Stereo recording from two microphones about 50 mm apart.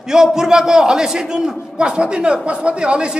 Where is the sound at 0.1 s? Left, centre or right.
Centre.